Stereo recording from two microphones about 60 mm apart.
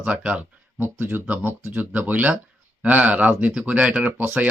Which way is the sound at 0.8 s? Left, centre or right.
Right.